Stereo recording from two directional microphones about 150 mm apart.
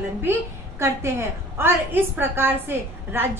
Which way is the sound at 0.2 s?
15° right (ahead or behind).